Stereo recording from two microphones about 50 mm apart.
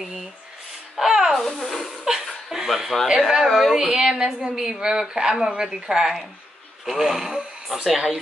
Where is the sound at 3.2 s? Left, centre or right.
Centre.